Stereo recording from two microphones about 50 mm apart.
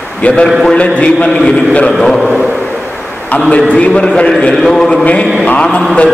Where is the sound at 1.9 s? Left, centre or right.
Centre.